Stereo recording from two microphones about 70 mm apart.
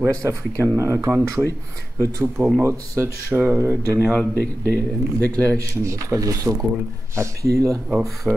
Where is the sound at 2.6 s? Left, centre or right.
Right.